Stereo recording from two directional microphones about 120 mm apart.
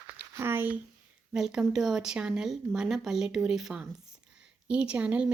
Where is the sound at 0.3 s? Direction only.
20° right (ahead or behind).